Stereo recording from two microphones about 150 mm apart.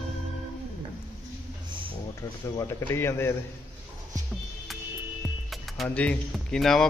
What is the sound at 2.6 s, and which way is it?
Speech, 20° left (ahead or behind).